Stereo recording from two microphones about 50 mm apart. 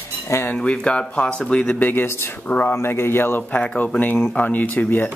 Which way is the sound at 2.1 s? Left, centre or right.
Left.